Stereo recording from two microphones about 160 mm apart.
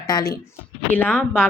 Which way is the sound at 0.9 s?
10° left (ahead or behind).